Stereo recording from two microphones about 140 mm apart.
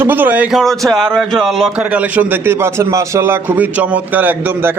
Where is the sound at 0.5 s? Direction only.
Centre (ahead or behind).